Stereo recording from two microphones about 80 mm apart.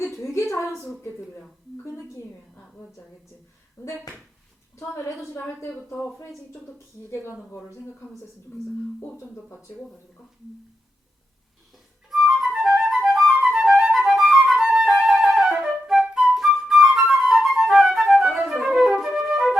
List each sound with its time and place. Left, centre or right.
0.1 s a sound: centre
3.8 s a woman's voice: left
9.2 s speech: left
12.1 s flute: centre